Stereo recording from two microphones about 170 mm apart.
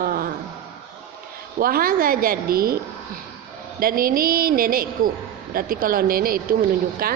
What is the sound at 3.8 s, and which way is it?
Speech, 60° right (ahead or behind).